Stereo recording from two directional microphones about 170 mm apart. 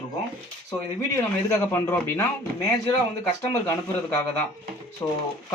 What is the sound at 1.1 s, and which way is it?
Speech, 15° left (ahead or behind).